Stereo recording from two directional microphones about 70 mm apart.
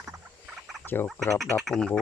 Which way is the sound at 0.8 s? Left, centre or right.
Left.